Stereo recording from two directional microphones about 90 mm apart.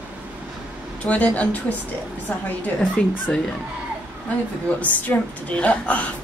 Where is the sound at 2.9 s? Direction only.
10° left (ahead or behind).